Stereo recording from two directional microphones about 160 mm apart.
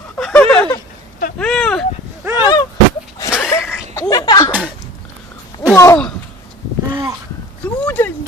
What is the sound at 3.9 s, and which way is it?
Chuckle, 20° left (ahead or behind).